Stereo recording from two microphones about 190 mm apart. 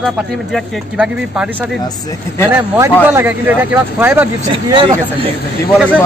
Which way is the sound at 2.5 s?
10° right (ahead or behind).